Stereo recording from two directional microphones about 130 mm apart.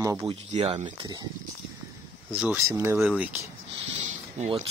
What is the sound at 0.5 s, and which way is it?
Speech, 45° right (ahead or behind).